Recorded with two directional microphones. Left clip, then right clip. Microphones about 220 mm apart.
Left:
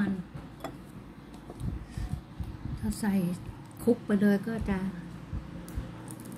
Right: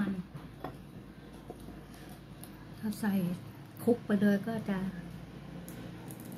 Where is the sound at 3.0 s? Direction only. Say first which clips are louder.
Left 3 dB; 20° left (ahead or behind).